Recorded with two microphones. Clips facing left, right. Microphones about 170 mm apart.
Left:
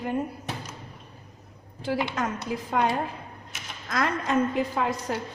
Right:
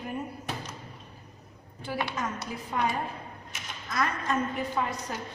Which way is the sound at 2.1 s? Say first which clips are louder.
Left 5 dB; 90° left.